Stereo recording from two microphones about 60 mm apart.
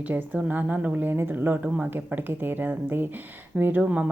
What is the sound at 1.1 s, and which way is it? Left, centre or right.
A woman's voice, right.